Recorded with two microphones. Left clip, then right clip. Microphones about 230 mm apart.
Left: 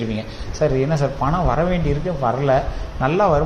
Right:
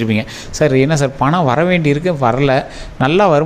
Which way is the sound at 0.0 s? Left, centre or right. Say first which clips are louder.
Right 8 dB; right.